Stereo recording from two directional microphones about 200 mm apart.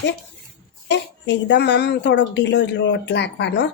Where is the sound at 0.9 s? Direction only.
60° left (ahead or behind).